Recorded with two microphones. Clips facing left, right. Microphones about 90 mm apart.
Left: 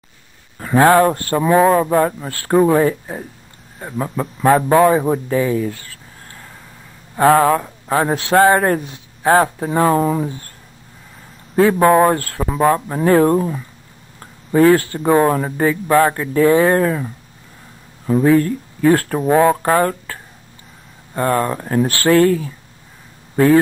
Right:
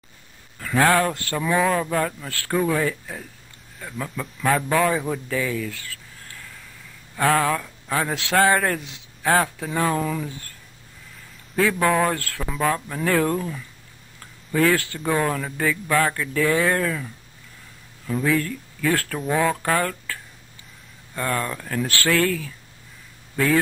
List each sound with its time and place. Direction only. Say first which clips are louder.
0.6 s a man's voice: left 7 dB; 30° left (ahead or behind)
11.5 s speech: left 8 dB; 30° left (ahead or behind)